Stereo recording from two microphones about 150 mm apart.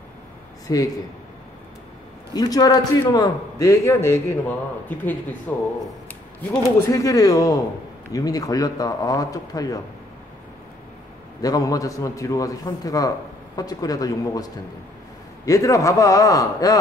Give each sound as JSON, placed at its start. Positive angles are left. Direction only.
{"t": 0.7, "sound": "a man's voice", "side_deg": 25}
{"t": 2.3, "sound": "a man's voice", "side_deg": 25}
{"t": 6.9, "sound": "a man's voice", "side_deg": 25}
{"t": 11.4, "sound": "a man's voice", "side_deg": 25}